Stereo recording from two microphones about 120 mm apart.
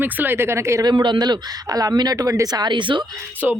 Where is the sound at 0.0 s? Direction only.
15° right (ahead or behind).